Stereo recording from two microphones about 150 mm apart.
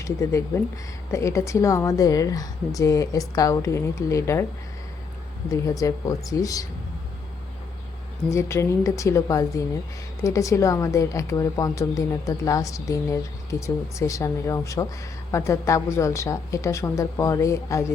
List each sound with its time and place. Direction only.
0.0 s a woman's voice: 20° left (ahead or behind)
5.5 s a woman's voice: 25° left (ahead or behind)
8.3 s a woman's voice: 20° left (ahead or behind)